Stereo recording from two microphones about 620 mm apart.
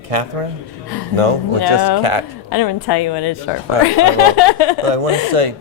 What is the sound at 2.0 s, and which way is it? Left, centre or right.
Speech, right.